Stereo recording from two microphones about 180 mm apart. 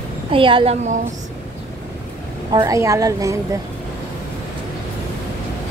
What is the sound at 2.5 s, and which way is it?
A woman's voice, 20° right (ahead or behind).